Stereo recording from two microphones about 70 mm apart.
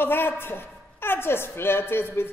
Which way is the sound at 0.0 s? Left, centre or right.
Left.